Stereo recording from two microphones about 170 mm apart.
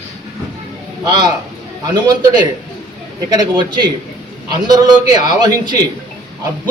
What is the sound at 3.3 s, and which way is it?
A man's voice, 25° right (ahead or behind).